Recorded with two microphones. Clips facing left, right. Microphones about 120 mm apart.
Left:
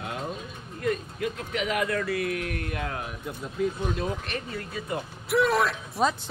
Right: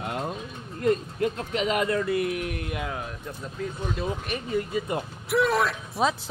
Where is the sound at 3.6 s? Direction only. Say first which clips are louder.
Left 6 dB; 10° left (ahead or behind).